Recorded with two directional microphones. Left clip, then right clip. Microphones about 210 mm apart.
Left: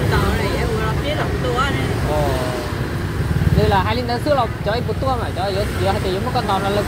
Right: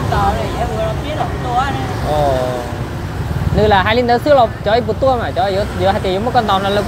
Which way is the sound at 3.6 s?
45° right (ahead or behind).